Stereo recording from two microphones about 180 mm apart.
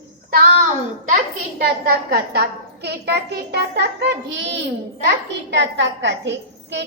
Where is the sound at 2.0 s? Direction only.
60° right (ahead or behind).